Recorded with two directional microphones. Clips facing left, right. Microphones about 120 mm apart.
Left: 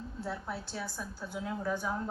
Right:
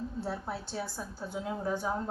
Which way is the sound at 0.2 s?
30° right (ahead or behind).